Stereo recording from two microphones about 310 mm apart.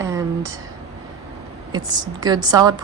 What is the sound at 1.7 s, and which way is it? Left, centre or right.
Speech, centre.